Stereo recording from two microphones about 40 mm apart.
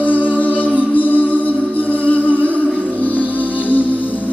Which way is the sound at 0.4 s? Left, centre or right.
Left.